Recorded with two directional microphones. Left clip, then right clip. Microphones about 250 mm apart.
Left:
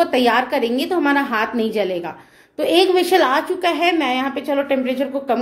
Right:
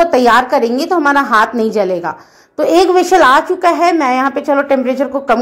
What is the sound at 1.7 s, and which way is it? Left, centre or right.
A woman's voice, centre.